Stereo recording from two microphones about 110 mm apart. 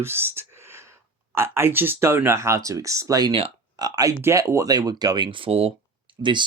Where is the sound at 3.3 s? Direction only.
55° right (ahead or behind).